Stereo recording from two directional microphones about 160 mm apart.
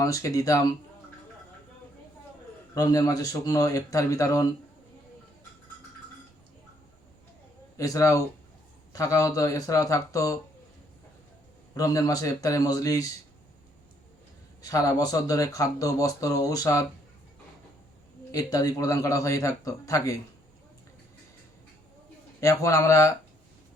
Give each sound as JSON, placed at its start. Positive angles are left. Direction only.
{"t": 0.0, "sound": "speech", "side_deg": 20}
{"t": 2.7, "sound": "speech", "side_deg": 20}
{"t": 7.8, "sound": "speech", "side_deg": 20}
{"t": 11.7, "sound": "speech", "side_deg": 20}
{"t": 14.6, "sound": "speech", "side_deg": 20}
{"t": 18.3, "sound": "speech", "side_deg": 20}
{"t": 22.4, "sound": "speech", "side_deg": 20}